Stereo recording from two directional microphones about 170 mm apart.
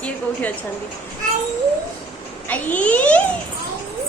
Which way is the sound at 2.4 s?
10° left (ahead or behind).